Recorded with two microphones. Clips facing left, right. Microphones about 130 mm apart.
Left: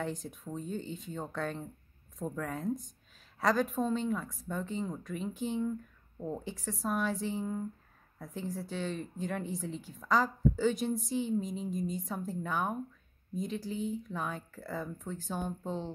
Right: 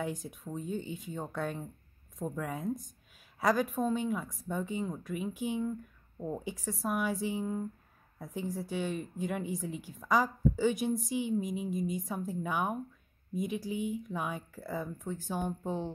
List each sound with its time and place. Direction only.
0.0 s speech: 10° right (ahead or behind)